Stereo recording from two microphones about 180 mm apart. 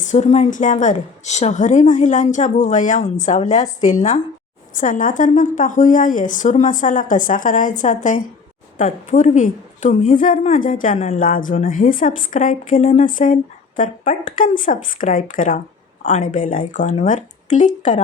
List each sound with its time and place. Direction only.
0.0 s a woman's voice: 40° left (ahead or behind)
11.2 s a woman's voice: 50° left (ahead or behind)